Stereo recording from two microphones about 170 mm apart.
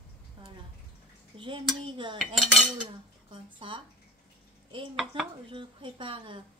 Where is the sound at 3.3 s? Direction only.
30° right (ahead or behind).